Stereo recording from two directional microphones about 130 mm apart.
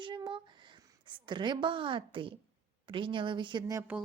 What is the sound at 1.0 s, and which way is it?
A woman's voice, 35° right (ahead or behind).